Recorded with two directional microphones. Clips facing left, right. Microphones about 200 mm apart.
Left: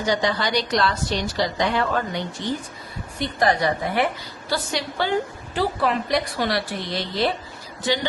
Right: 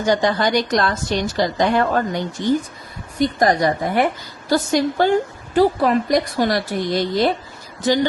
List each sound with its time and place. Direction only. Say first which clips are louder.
0.0 s a woman's voice: right 5 dB; 50° right (ahead or behind)